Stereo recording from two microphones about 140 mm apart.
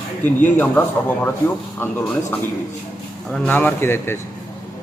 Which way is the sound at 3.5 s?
15° left (ahead or behind).